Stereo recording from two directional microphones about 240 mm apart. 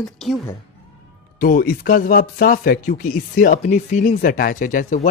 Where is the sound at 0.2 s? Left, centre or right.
Centre.